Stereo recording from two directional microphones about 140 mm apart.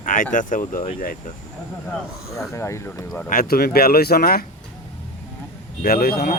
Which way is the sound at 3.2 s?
85° left.